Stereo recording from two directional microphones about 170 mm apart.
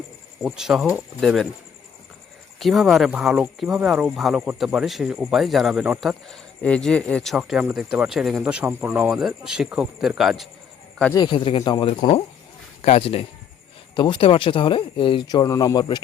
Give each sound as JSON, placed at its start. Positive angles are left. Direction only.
{"t": 0.4, "sound": "speech", "side_deg": -5}
{"t": 2.6, "sound": "speech", "side_deg": 0}
{"t": 11.1, "sound": "speech", "side_deg": 25}
{"t": 12.8, "sound": "speech", "side_deg": 40}